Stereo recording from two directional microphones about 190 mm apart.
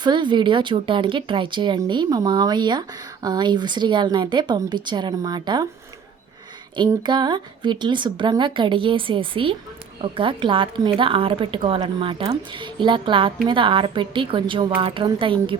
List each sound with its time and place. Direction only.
0.0 s speech: 25° right (ahead or behind)
6.7 s speech: 25° right (ahead or behind)